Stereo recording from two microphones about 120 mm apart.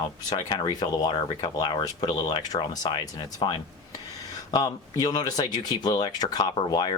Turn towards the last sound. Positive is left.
turn(degrees=40)  # may be behind; listen again after turning